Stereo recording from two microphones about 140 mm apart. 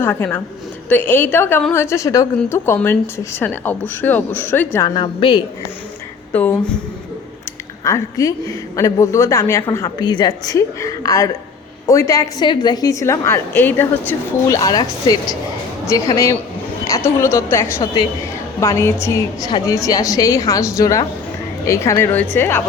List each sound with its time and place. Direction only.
0.0 s a woman's voice: 15° left (ahead or behind)
4.9 s a woman's voice: 35° left (ahead or behind)
6.3 s a woman's voice: 10° left (ahead or behind)
7.9 s a woman's voice: 25° left (ahead or behind)